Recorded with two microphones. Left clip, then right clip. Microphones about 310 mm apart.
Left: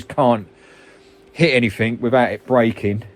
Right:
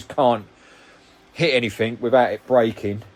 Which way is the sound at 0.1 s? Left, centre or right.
Left.